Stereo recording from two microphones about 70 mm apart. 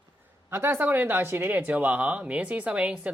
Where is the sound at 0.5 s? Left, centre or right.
Right.